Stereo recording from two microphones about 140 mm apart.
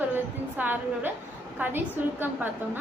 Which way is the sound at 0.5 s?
15° right (ahead or behind).